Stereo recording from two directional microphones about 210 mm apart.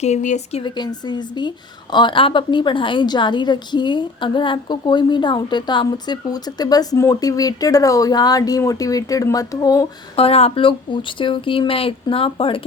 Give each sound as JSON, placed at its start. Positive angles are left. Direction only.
{"t": 0.0, "sound": "a woman's voice", "side_deg": 35}